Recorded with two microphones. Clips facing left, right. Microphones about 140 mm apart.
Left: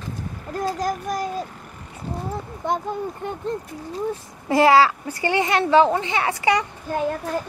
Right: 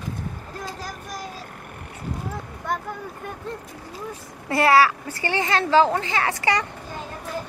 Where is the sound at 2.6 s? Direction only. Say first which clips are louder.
Left 4 dB; 20° left (ahead or behind).